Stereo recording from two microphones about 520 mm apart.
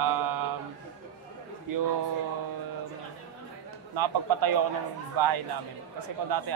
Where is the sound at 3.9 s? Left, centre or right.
Right.